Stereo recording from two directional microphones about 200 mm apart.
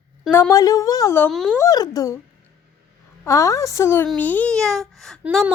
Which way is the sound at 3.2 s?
15° left (ahead or behind).